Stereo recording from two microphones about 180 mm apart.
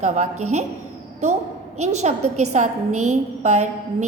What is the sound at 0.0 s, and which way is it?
A woman's voice, 40° right (ahead or behind).